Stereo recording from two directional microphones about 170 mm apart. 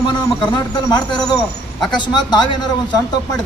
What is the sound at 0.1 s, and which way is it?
A man's voice, 25° left (ahead or behind).